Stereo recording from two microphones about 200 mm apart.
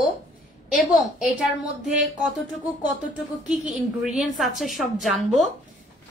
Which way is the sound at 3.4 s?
Centre (ahead or behind).